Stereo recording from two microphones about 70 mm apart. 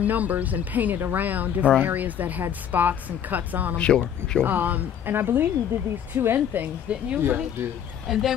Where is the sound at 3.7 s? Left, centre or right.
Centre.